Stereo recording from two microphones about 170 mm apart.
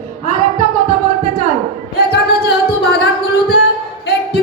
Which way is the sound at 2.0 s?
70° left (ahead or behind).